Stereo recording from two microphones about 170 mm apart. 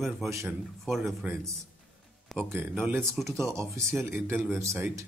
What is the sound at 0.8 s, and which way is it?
Speech, centre (ahead or behind).